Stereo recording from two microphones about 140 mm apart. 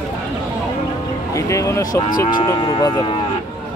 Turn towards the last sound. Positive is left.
turn(degrees=35)  # may be behind; listen again after turning